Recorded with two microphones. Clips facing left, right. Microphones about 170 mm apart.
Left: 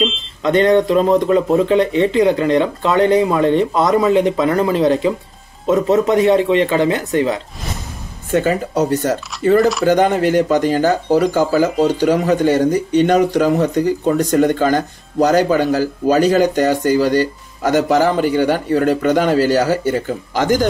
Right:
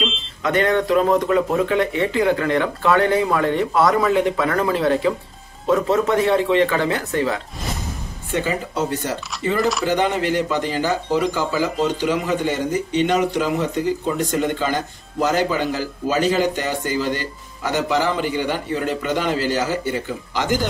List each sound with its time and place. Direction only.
0.4 s a man's voice: 20° left (ahead or behind)
8.3 s speech: 45° left (ahead or behind)
9.6 s speech: centre (ahead or behind)
9.8 s speech: 40° left (ahead or behind)